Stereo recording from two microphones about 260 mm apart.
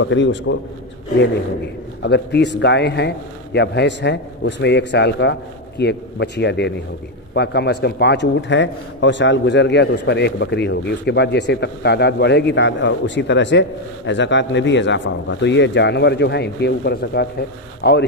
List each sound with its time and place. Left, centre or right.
0.0 s a man's voice: left
2.0 s a man's voice: left